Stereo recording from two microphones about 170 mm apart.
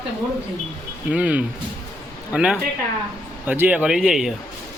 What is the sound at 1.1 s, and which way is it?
Speech, 10° right (ahead or behind).